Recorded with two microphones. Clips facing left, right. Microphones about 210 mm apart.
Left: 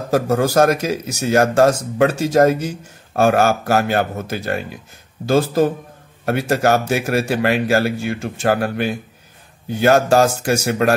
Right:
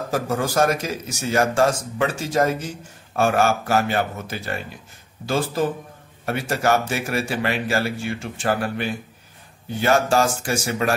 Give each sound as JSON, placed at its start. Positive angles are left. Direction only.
{"t": 0.1, "sound": "speech", "side_deg": 40}
{"t": 10.6, "sound": "speech", "side_deg": 55}